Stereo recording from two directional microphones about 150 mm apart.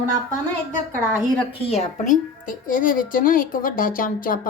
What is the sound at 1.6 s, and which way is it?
A woman's voice, 45° left (ahead or behind).